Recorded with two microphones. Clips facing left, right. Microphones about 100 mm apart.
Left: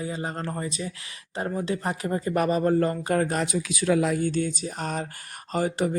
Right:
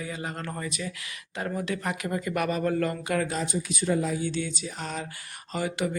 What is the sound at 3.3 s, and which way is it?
Speech, 90° left.